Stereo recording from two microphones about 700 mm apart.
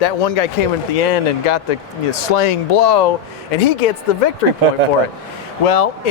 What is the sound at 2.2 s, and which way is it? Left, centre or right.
Speech, left.